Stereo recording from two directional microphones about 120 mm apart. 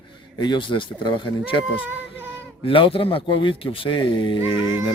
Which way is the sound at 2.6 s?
50° left (ahead or behind).